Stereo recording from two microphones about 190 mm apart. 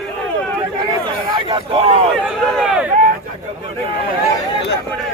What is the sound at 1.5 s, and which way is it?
Speech, 25° right (ahead or behind).